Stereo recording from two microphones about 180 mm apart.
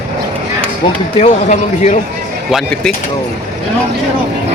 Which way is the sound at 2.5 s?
Centre (ahead or behind).